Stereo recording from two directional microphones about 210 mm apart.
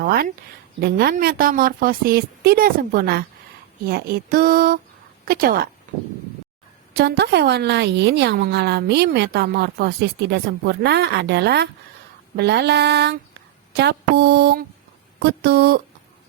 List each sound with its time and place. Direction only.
0.0 s a woman's voice: 45° right (ahead or behind)
6.9 s a woman's voice: 50° right (ahead or behind)